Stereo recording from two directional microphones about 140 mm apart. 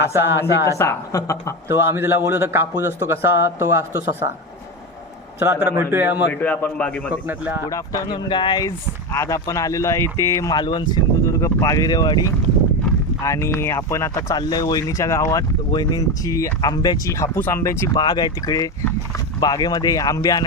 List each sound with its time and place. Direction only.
0.1 s a man's voice: 15° right (ahead or behind)
0.8 s speech: 25° left (ahead or behind)
1.6 s a man's voice: 20° right (ahead or behind)
5.4 s a man's voice: 15° right (ahead or behind)
6.4 s a man's voice: 10° left (ahead or behind)
7.1 s a man's voice: 10° right (ahead or behind)
7.7 s speech: 25° left (ahead or behind)